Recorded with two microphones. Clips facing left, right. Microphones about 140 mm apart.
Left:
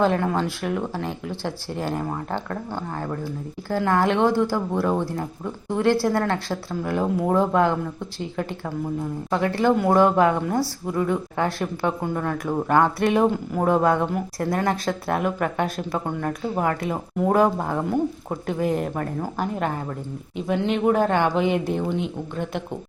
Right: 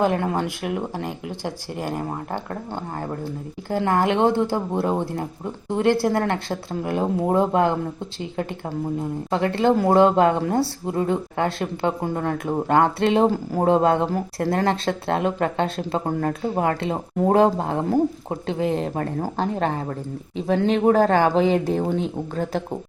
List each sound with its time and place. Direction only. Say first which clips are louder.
0.0 s speech: even; 20° right (ahead or behind)
2.5 s speech: even; 25° right (ahead or behind)